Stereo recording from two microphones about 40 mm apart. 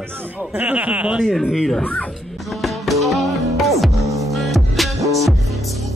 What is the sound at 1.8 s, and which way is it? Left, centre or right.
Speech, left.